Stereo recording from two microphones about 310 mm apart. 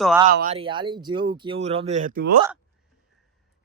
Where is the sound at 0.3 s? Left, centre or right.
Right.